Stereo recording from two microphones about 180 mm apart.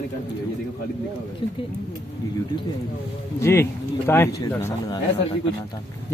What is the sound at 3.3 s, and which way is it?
Speech, 15° left (ahead or behind).